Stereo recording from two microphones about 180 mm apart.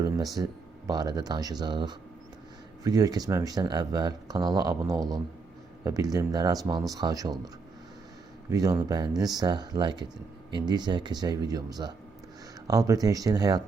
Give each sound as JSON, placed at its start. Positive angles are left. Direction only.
{"t": 0.0, "sound": "a sound", "side_deg": -20}
{"t": 0.9, "sound": "speech", "side_deg": -20}
{"t": 8.5, "sound": "speech", "side_deg": -20}